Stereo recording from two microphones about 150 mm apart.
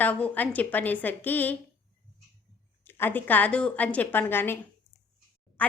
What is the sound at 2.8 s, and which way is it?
Speech, 15° left (ahead or behind).